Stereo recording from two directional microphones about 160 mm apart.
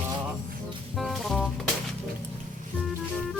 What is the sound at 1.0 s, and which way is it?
Music, centre (ahead or behind).